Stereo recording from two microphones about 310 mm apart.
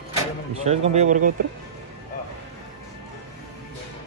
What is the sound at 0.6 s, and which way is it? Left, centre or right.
Speech, right.